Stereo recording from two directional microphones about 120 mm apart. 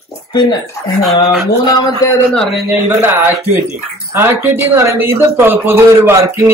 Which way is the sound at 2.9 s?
20° right (ahead or behind).